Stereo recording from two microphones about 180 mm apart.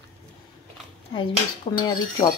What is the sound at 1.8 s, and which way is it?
Speech, 20° left (ahead or behind).